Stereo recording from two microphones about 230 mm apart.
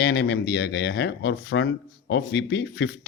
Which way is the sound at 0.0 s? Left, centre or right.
Left.